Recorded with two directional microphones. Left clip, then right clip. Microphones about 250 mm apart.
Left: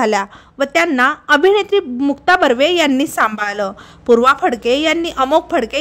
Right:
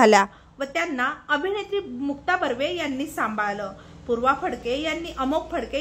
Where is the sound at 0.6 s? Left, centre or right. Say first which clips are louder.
Left 12 dB; left.